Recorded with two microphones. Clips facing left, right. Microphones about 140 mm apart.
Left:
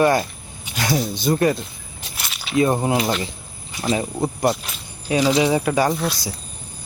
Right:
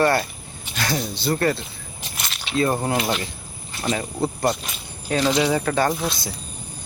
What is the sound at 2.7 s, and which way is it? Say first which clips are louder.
Speech: left 3 dB; 10° left (ahead or behind).